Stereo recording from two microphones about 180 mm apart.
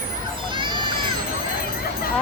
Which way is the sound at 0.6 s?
25° right (ahead or behind).